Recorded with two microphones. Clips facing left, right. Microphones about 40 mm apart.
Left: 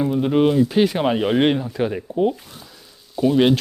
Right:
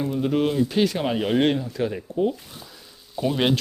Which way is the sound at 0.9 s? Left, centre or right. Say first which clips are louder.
Left 4 dB; left.